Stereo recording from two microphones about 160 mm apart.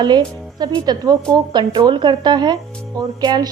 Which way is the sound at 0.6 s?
25° right (ahead or behind).